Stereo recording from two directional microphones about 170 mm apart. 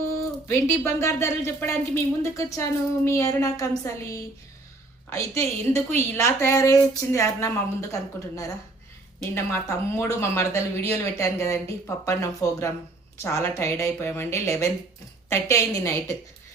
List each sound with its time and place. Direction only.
0.4 s speech: 15° left (ahead or behind)
9.3 s speech: 15° left (ahead or behind)